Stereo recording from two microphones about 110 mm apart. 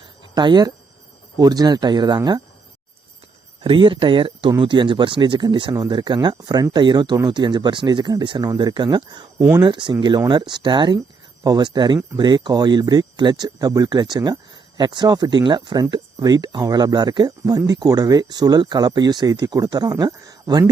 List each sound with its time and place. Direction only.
0.0 s a sound: 40° right (ahead or behind)
1.4 s speech: 35° right (ahead or behind)
3.6 s speech: 50° right (ahead or behind); by 20.7 s 35° right (ahead or behind)